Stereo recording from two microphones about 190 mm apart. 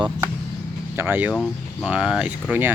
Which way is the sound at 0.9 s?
10° right (ahead or behind).